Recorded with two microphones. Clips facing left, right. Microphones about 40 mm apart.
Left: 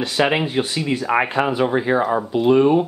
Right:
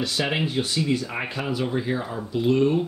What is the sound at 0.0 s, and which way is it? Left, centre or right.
Speech, left.